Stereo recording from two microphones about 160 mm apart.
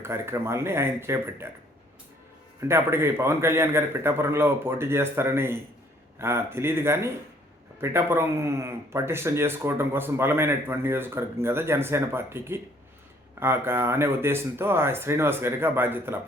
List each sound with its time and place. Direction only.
0.0 s speech: 15° right (ahead or behind)
2.6 s speech: 15° right (ahead or behind)